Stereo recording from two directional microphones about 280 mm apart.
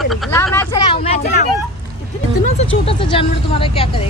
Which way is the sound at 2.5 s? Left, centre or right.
Centre.